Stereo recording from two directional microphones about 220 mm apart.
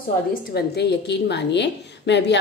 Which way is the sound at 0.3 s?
45° left (ahead or behind).